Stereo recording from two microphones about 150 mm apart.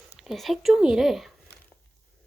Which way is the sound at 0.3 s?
Centre (ahead or behind).